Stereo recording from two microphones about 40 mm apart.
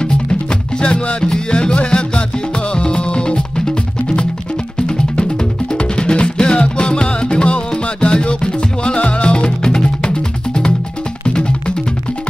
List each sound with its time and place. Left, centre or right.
0.0 s music: left
4.7 s music: centre